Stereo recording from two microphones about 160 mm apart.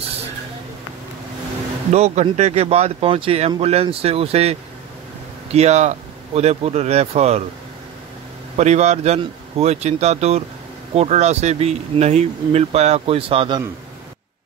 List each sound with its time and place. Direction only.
1.9 s speech: 45° right (ahead or behind)
8.5 s speech: 45° right (ahead or behind)